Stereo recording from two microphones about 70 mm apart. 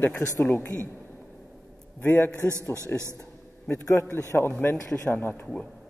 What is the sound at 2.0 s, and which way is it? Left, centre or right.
A man's voice, left.